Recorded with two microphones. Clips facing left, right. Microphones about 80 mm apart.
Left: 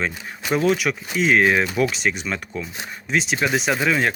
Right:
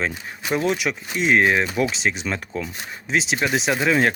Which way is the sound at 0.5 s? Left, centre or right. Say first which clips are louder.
Left 2 dB; centre.